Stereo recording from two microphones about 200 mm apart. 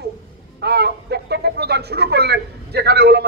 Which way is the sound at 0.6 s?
55° right (ahead or behind).